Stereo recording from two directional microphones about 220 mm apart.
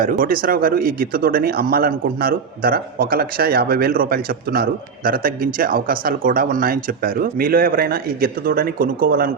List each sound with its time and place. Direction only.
0.0 s speech: 40° right (ahead or behind)